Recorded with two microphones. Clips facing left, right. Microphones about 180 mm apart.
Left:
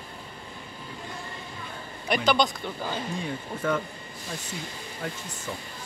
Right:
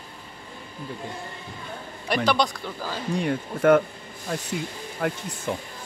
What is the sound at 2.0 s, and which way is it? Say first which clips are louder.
Speech: right 1 dB; centre (ahead or behind).